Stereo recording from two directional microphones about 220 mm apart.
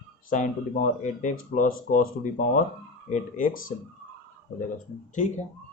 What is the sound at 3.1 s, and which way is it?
Speech, 40° left (ahead or behind).